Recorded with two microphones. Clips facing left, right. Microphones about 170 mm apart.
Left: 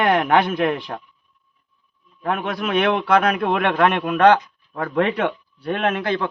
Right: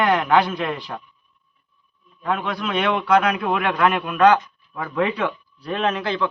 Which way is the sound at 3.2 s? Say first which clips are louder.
Left 1 dB; 60° left (ahead or behind).